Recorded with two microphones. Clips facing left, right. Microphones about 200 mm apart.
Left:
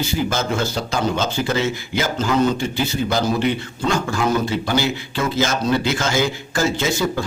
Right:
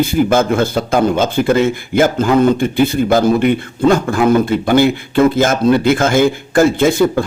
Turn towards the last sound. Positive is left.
turn(degrees=-55)  # may be behind; listen again after turning